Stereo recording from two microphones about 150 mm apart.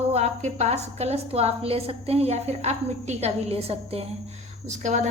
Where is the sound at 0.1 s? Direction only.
45° right (ahead or behind).